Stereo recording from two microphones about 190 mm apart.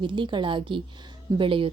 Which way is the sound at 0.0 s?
25° right (ahead or behind).